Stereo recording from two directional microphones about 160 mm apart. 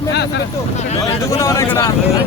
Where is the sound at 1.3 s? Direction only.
20° left (ahead or behind).